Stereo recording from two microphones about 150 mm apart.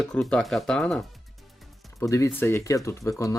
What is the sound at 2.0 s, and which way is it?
Speech, 20° left (ahead or behind).